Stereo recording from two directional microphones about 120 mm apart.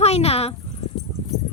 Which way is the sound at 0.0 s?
60° left (ahead or behind).